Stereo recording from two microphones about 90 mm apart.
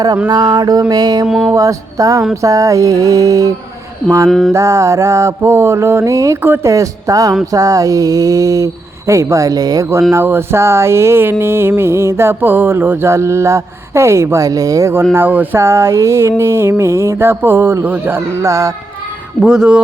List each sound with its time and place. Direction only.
0.3 s a sound: 45° right (ahead or behind)
1.5 s speech: 40° right (ahead or behind)
4.3 s music: centre (ahead or behind)
4.5 s speech: 35° right (ahead or behind)
10.1 s music: 25° right (ahead or behind)
15.1 s music: 20° right (ahead or behind)
18.4 s speech: 35° right (ahead or behind)
19.4 s speech: 10° right (ahead or behind)